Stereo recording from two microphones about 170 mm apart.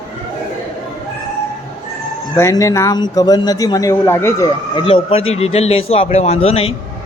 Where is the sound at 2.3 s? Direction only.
15° left (ahead or behind).